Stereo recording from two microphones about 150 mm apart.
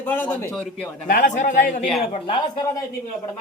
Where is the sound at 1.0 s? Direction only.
60° left (ahead or behind).